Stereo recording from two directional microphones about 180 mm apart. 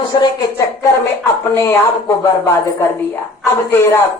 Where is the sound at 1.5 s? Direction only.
15° left (ahead or behind).